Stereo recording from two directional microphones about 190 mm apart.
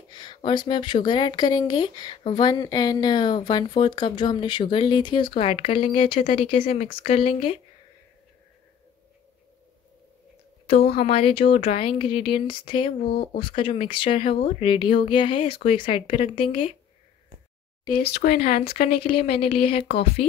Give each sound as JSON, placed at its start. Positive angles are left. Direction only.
{"t": 0.1, "sound": "speech", "side_deg": 25}
{"t": 10.7, "sound": "speech", "side_deg": 30}
{"t": 18.2, "sound": "speech", "side_deg": 35}